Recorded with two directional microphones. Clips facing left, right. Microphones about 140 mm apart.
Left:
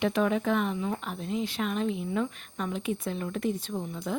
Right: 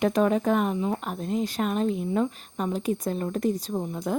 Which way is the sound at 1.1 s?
45° right (ahead or behind).